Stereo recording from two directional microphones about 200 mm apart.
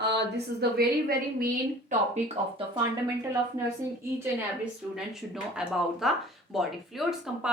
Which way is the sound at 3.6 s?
15° right (ahead or behind).